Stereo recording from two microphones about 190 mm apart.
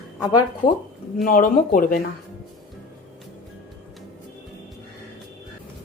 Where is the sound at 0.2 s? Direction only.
20° left (ahead or behind).